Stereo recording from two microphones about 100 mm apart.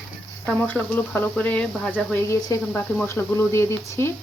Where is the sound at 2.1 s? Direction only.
25° left (ahead or behind).